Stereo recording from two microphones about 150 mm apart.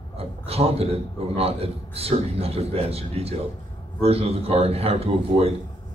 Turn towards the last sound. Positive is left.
turn(degrees=-40)  # may be behind; listen again after turning